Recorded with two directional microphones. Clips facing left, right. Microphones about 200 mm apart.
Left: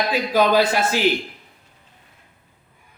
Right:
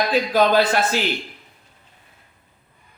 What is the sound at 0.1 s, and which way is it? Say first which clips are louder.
Speech: even; 10° left (ahead or behind).